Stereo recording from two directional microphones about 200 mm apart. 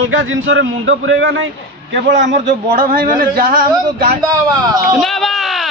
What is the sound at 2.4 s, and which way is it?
Speech, 50° right (ahead or behind).